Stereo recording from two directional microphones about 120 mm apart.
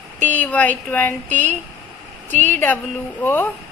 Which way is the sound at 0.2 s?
15° left (ahead or behind).